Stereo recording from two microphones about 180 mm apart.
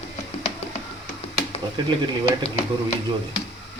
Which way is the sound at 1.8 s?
25° right (ahead or behind).